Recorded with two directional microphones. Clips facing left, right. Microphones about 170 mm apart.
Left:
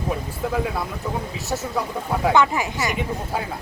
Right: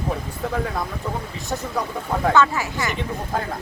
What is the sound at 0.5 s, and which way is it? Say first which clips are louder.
Speech: left 1 dB; 5° left (ahead or behind).